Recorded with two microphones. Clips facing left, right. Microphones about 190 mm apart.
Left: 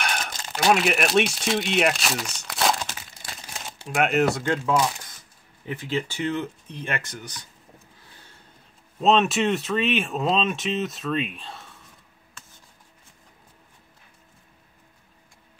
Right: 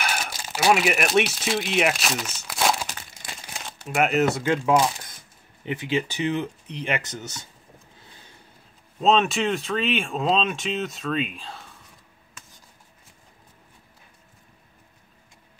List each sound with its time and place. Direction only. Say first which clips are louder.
0.0 s speech: even; 5° right (ahead or behind)
5.7 s speech: right 2 dB; 15° right (ahead or behind)
9.0 s speech: left 1 dB; centre (ahead or behind)